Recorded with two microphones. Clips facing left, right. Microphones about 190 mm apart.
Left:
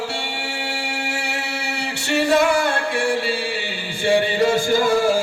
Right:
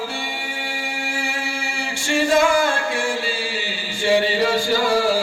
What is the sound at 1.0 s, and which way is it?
Music, 70° left (ahead or behind).